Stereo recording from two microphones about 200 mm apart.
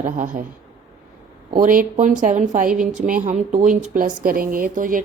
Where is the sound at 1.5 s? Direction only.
45° right (ahead or behind).